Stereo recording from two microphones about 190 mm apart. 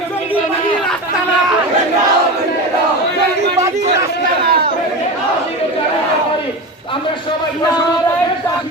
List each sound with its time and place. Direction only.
4.4 s chatter: 55° right (ahead or behind)